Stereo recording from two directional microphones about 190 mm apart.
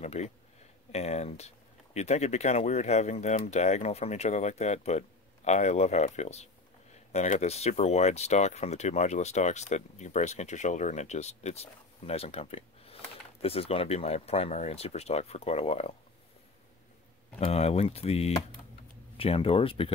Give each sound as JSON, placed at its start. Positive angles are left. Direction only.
{"t": 0.0, "sound": "speech", "side_deg": 35}
{"t": 17.4, "sound": "speech", "side_deg": 35}